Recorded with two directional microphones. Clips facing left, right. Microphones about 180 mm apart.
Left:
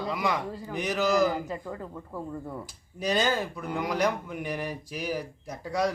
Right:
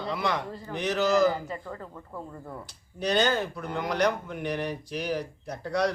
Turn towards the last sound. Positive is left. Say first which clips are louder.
# right 1 dB
turn(degrees=10)  # may be behind; listen again after turning